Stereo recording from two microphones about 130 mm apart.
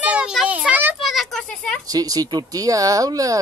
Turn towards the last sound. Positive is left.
turn(degrees=-25)  # may be behind; listen again after turning